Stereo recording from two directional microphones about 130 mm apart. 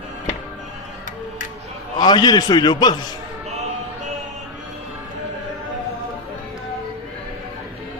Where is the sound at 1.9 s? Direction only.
30° left (ahead or behind).